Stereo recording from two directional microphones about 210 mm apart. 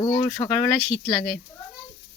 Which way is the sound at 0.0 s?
20° left (ahead or behind).